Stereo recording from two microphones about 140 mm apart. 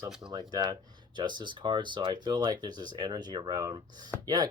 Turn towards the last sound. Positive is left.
turn(degrees=-30)  # may be behind; listen again after turning